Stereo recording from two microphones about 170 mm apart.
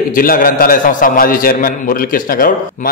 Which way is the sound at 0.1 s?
55° left (ahead or behind).